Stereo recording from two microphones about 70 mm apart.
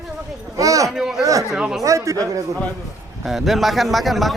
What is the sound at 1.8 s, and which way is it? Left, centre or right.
Speech, right.